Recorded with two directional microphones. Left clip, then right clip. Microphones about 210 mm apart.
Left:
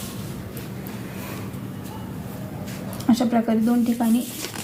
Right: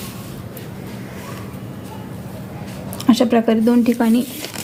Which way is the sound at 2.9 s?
50° right (ahead or behind).